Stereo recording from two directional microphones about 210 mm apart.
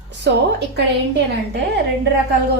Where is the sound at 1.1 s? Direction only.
55° right (ahead or behind).